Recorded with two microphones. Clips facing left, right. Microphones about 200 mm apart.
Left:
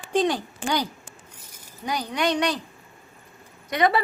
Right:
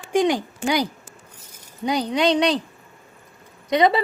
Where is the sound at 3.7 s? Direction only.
20° right (ahead or behind).